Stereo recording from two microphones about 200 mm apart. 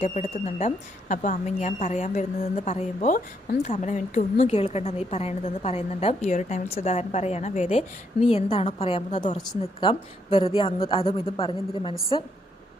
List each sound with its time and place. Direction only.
0.0 s a woman's voice: 35° left (ahead or behind)